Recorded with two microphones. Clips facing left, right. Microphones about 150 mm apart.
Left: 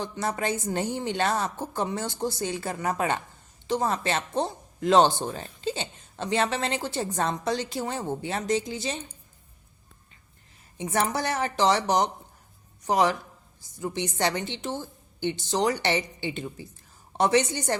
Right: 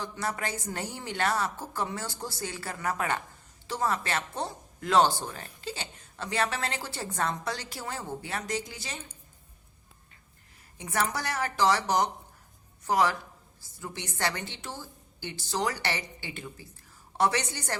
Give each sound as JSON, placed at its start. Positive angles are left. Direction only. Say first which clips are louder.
{"t": 0.0, "sound": "a woman's voice", "louder": "left 4 dB", "side_deg": 20}
{"t": 10.8, "sound": "a woman's voice", "louder": "left 4 dB", "side_deg": 25}